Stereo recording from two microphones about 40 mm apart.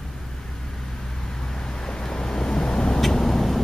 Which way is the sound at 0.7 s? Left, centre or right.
Centre.